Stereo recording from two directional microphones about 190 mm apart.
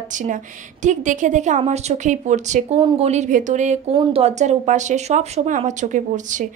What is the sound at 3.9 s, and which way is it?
A woman's voice, 30° right (ahead or behind).